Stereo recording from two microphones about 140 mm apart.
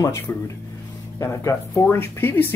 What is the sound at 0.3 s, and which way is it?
Speech, 15° left (ahead or behind).